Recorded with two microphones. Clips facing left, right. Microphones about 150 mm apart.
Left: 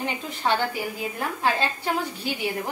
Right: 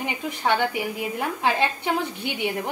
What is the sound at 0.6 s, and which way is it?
A woman's voice, 20° right (ahead or behind).